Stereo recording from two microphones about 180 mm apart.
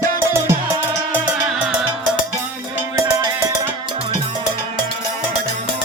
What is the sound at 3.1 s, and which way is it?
Music, 15° right (ahead or behind).